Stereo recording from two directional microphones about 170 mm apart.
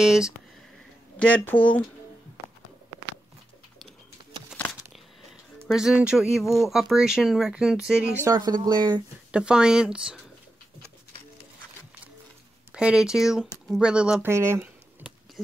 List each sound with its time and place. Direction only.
0.0 s speech: 5° right (ahead or behind)
1.2 s speech: 10° left (ahead or behind)
5.7 s speech: 5° right (ahead or behind)
8.3 s speech: 25° right (ahead or behind)
9.3 s speech: 5° right (ahead or behind)
12.7 s speech: 5° right (ahead or behind)
14.3 s a sound: 15° right (ahead or behind)